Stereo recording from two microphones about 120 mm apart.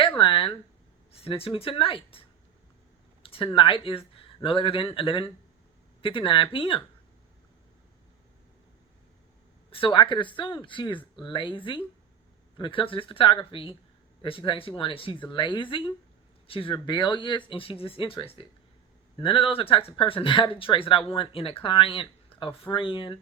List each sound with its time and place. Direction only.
0.2 s a sound: 45° left (ahead or behind)
1.1 s speech: 55° left (ahead or behind)
3.2 s speech: 45° left (ahead or behind)
9.6 s speech: 50° left (ahead or behind)